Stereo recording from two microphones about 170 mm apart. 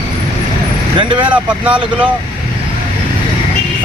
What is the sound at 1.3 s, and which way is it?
Speech, 10° right (ahead or behind).